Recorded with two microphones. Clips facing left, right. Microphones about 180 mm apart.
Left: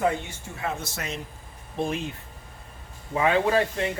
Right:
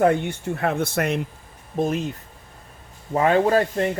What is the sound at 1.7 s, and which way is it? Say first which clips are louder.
Speech: right 5 dB; 45° right (ahead or behind).